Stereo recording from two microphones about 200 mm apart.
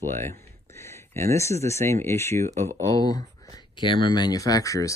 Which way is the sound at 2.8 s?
20° left (ahead or behind).